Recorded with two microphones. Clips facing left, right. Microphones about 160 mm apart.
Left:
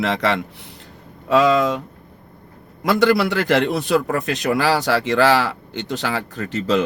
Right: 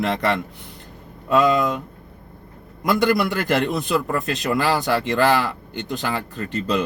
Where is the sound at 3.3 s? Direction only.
75° left (ahead or behind).